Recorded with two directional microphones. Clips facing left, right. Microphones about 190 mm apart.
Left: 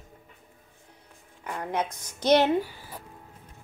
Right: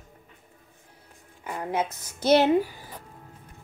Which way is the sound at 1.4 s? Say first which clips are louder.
Right 2 dB; 5° right (ahead or behind).